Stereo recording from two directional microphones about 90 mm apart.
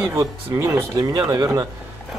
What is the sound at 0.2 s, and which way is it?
Speech, 40° right (ahead or behind).